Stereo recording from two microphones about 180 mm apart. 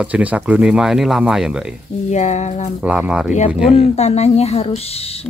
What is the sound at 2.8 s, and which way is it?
Speech, 5° right (ahead or behind).